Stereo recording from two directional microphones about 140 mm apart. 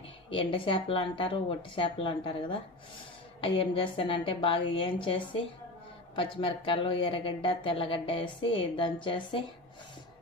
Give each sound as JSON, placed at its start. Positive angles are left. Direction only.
{"t": 0.3, "sound": "speech", "side_deg": 35}